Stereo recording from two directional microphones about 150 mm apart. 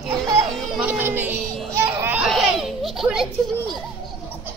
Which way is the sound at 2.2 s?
Centre (ahead or behind).